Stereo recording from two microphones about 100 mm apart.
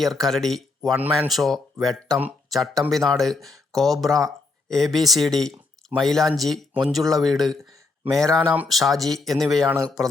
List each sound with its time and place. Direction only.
0.0 s speech: centre (ahead or behind)
0.9 s speech: 15° right (ahead or behind)
1.3 s speech: centre (ahead or behind)